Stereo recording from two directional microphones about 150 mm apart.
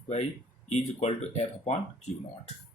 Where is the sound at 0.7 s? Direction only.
45° left (ahead or behind).